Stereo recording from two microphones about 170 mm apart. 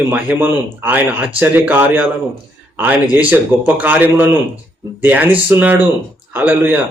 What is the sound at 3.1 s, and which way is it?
A man's voice, 10° right (ahead or behind).